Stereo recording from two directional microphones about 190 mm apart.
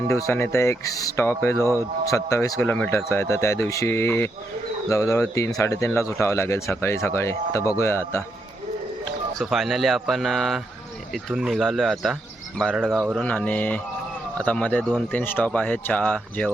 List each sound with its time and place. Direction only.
0.1 s speech: 15° left (ahead or behind)
9.4 s speech: centre (ahead or behind)
13.2 s speech: 10° left (ahead or behind)